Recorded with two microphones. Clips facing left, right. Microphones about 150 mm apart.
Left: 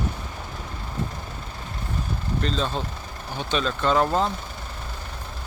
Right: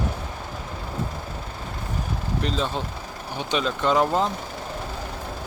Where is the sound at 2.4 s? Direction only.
15° right (ahead or behind).